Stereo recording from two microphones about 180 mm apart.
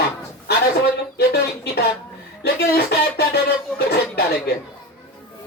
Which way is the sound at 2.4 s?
65° left (ahead or behind).